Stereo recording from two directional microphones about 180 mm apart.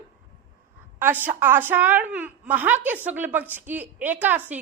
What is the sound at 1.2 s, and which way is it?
A woman's voice, 10° right (ahead or behind).